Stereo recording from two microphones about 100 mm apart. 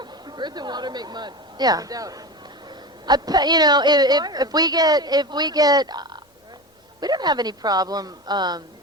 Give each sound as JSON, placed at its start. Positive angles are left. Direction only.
{"t": 0.0, "sound": "a woman's voice", "side_deg": -45}